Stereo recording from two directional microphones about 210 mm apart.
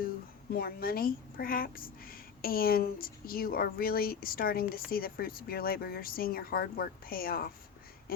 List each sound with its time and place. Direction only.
0.5 s speech: 45° left (ahead or behind)